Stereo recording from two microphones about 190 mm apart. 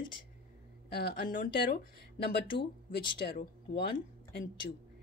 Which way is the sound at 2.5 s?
25° left (ahead or behind).